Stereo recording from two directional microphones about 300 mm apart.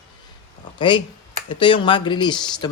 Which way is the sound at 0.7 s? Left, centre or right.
Centre.